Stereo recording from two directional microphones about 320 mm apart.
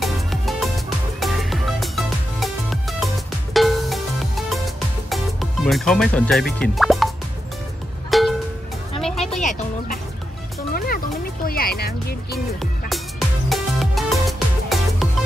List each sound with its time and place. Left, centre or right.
0.0 s music: centre
8.1 s music: centre
9.4 s music: left
11.4 s music: left
13.5 s music: centre